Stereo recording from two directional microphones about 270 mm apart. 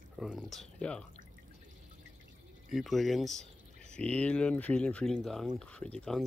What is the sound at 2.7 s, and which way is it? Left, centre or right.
Speech, centre.